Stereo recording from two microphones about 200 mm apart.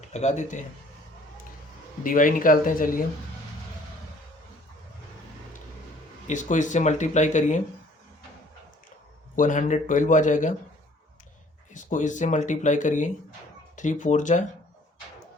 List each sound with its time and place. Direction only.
0.1 s speech: 35° left (ahead or behind)
2.0 s speech: 40° left (ahead or behind)
6.2 s speech: 40° left (ahead or behind)
9.3 s speech: 40° left (ahead or behind)
11.7 s speech: 40° left (ahead or behind)